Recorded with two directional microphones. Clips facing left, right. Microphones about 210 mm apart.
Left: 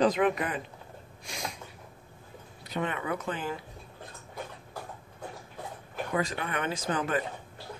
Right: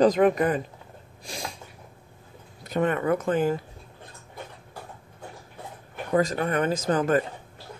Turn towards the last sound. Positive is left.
turn(degrees=-45)  # may be behind; listen again after turning